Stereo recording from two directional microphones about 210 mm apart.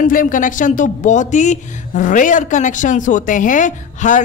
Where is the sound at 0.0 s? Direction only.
40° left (ahead or behind).